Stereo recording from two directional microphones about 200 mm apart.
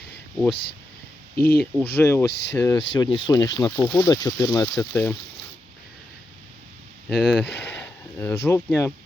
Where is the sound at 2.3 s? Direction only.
60° left (ahead or behind).